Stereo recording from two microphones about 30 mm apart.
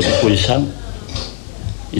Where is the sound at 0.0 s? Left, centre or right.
Centre.